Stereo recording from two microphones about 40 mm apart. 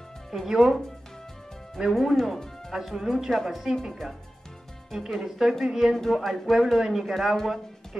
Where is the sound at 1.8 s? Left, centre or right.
Centre.